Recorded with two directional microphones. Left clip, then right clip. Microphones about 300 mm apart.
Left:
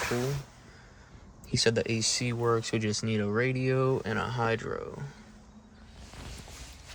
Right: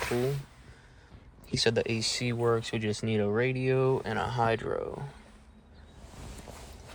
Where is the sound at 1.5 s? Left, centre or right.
Centre.